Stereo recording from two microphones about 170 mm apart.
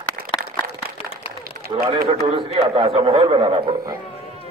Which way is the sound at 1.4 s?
60° right (ahead or behind).